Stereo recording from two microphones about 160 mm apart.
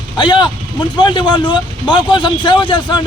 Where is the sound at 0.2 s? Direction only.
30° left (ahead or behind).